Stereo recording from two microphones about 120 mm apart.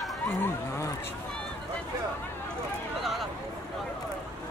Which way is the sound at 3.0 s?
Centre (ahead or behind).